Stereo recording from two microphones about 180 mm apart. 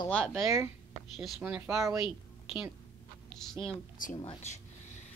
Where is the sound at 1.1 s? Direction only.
5° right (ahead or behind).